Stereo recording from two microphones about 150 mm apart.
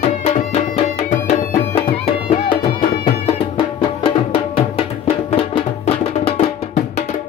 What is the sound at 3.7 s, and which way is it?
Music, 35° left (ahead or behind).